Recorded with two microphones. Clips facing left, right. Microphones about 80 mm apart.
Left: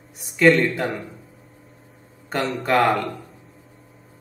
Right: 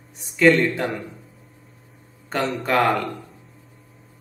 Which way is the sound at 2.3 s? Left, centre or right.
Centre.